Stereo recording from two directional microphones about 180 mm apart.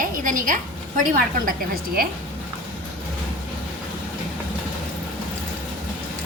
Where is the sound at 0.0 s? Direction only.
50° right (ahead or behind).